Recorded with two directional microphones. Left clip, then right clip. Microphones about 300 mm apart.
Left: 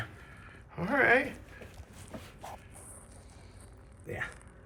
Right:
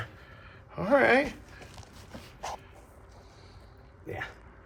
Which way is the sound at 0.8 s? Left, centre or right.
Centre.